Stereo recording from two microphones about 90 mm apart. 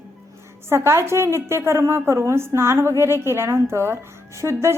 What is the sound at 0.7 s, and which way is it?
A woman's voice, 30° right (ahead or behind).